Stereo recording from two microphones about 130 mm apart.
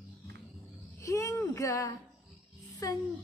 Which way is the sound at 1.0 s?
25° left (ahead or behind).